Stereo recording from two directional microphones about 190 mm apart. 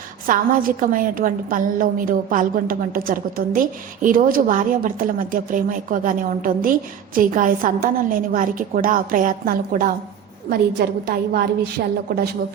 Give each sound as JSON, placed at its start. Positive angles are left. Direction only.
{"t": 0.3, "sound": "a woman's voice", "side_deg": -45}